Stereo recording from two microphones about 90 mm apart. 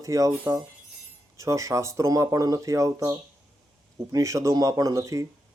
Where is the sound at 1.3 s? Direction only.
35° right (ahead or behind).